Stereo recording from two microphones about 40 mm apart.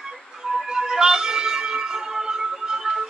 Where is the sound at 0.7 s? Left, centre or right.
Centre.